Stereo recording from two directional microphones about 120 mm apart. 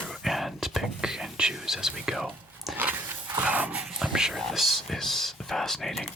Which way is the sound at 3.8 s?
5° right (ahead or behind).